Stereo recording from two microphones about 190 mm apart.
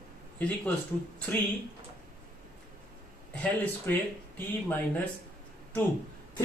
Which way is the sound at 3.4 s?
10° left (ahead or behind).